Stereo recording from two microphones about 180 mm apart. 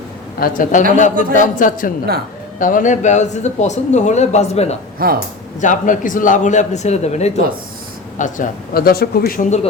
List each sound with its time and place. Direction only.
0.3 s a man's voice: 50° left (ahead or behind); by 4.8 s 35° left (ahead or behind)
5.0 s speech: 55° right (ahead or behind)
5.5 s speech: 45° left (ahead or behind)
8.2 s speech: 50° left (ahead or behind)